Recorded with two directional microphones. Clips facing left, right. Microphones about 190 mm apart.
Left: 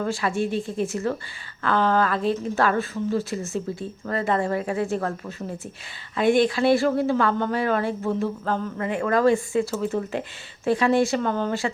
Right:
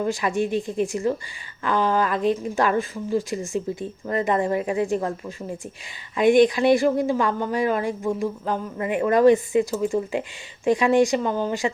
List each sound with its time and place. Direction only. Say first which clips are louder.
0.0 s speech: right 1 dB; 15° right (ahead or behind)